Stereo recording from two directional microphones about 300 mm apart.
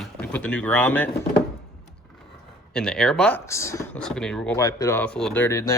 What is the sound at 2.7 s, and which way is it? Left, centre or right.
Speech, centre.